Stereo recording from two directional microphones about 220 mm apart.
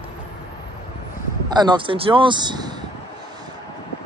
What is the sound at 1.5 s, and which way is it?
Speech, 20° right (ahead or behind).